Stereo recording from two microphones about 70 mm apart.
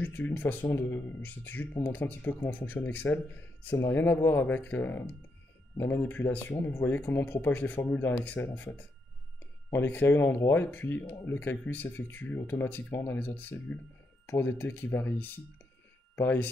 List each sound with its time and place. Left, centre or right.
0.0 s speech: left
10.1 s speech: left